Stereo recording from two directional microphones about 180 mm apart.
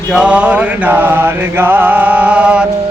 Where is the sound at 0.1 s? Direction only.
5° right (ahead or behind).